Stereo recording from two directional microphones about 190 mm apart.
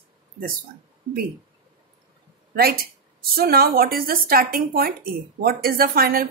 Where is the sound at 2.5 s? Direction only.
55° right (ahead or behind).